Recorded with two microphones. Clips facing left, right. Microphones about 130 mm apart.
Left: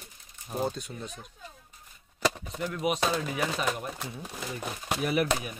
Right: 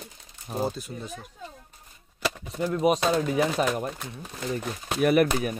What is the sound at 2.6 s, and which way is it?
Speech, 35° right (ahead or behind).